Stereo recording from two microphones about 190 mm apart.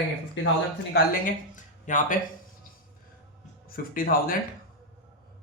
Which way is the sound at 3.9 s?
50° left (ahead or behind).